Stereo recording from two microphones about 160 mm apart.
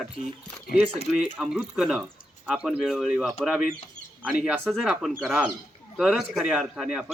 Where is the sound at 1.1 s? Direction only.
5° right (ahead or behind).